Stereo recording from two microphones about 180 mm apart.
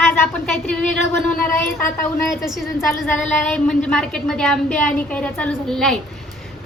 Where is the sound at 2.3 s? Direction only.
Centre (ahead or behind).